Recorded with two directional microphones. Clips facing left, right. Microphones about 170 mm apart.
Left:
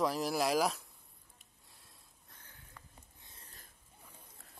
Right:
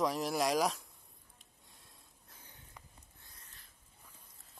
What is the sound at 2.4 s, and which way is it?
Sniff, 15° right (ahead or behind).